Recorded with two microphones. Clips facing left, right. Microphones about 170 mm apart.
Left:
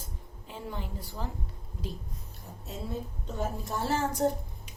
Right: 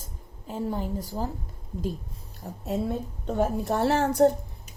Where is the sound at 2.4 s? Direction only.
70° right (ahead or behind).